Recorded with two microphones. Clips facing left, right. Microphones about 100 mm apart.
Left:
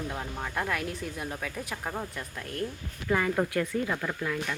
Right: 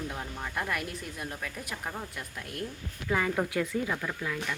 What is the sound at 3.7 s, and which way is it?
Speech, 40° left (ahead or behind).